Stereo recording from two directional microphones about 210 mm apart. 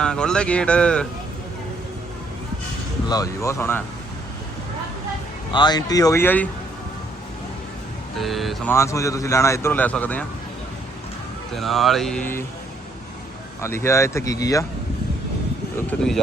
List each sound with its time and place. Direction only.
0.0 s speech: 5° left (ahead or behind)
3.1 s speech: 15° left (ahead or behind)
5.5 s speech: 20° left (ahead or behind)
8.2 s speech: centre (ahead or behind)
8.7 s speech: 15° left (ahead or behind)
11.5 s speech: centre (ahead or behind)
13.6 s speech: 10° left (ahead or behind)
15.9 s speech: 5° left (ahead or behind)